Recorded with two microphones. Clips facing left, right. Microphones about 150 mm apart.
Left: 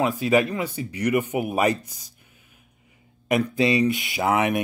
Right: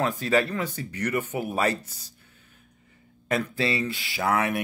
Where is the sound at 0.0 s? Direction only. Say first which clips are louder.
Left 3 dB; 10° left (ahead or behind).